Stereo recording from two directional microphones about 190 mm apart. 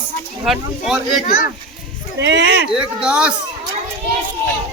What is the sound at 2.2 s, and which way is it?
Speech, 65° right (ahead or behind).